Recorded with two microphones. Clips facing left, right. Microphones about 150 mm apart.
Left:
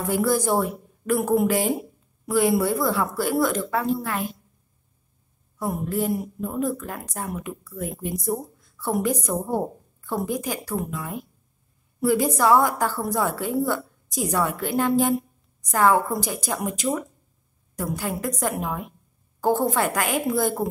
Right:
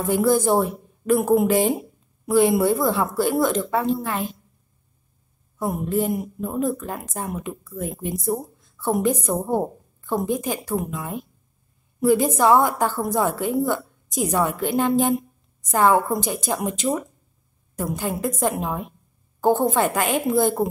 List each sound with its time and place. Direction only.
0.1 s speech: 25° right (ahead or behind)
5.6 s speech: 20° right (ahead or behind)